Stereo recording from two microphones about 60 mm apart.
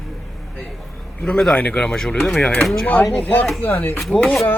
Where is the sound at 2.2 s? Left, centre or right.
Centre.